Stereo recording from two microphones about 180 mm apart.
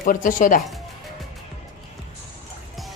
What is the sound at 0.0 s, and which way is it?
Speech, 50° left (ahead or behind).